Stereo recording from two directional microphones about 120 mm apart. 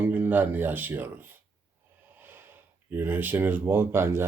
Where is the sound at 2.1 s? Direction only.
15° right (ahead or behind).